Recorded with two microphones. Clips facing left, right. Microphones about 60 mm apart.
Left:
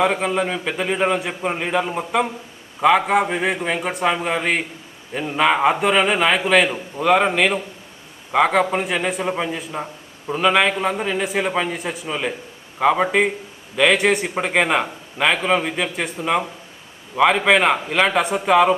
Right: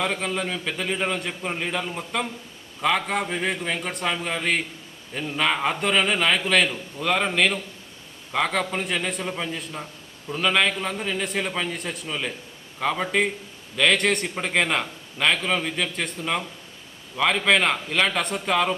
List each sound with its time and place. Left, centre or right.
0.0 s a man's voice: centre